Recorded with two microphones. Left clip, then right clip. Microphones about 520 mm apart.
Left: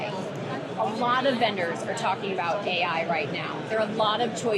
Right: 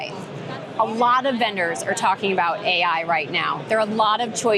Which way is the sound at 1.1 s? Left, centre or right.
Right.